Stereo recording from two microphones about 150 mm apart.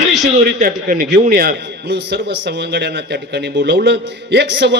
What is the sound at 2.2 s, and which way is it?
A man's voice, 90° right.